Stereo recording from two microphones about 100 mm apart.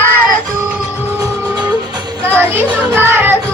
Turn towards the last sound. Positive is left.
turn(degrees=-20)  # may be behind; listen again after turning